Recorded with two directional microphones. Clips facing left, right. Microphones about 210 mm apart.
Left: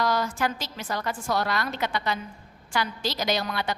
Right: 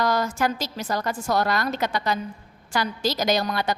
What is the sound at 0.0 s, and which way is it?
A woman's voice, 45° right (ahead or behind).